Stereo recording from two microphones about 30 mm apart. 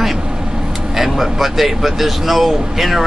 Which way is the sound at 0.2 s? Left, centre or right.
Right.